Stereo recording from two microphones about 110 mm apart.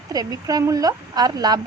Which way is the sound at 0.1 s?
35° right (ahead or behind).